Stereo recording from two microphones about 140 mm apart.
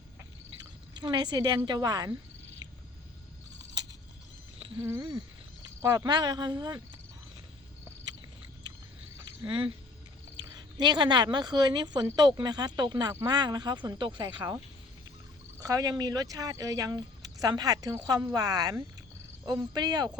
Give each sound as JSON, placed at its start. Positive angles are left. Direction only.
{"t": 0.9, "sound": "speech", "side_deg": -30}
{"t": 4.8, "sound": "speech", "side_deg": -20}
{"t": 10.8, "sound": "speech", "side_deg": -30}
{"t": 15.6, "sound": "speech", "side_deg": -25}